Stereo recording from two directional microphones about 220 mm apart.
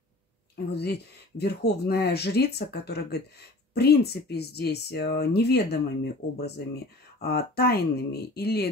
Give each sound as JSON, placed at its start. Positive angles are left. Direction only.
{"t": 0.7, "sound": "speech", "side_deg": 45}